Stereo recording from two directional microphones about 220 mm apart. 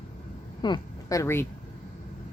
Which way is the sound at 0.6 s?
15° left (ahead or behind).